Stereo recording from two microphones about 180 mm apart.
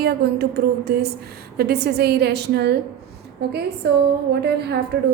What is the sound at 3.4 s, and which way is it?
Speech, 65° right (ahead or behind).